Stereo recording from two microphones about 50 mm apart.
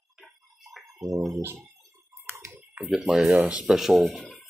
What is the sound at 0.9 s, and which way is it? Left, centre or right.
Speech, right.